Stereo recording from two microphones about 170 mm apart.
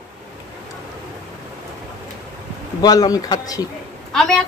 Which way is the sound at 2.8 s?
20° left (ahead or behind).